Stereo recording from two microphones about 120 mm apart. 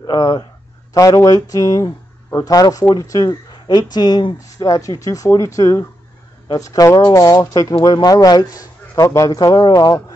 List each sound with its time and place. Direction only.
0.0 s speech: 35° left (ahead or behind)